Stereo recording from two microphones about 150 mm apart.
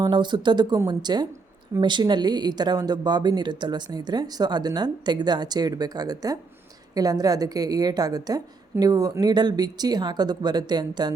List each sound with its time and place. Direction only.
0.0 s speech: 30° right (ahead or behind)